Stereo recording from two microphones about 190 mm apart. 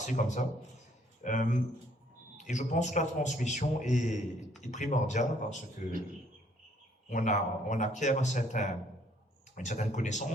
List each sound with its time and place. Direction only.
0.0 s a man's voice: 40° left (ahead or behind)
7.1 s a man's voice: 40° left (ahead or behind)